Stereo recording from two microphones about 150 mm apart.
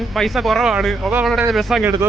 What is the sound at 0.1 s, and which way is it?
Speech, centre (ahead or behind).